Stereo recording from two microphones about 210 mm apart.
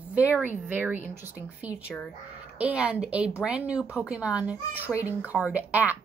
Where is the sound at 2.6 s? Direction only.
5° right (ahead or behind).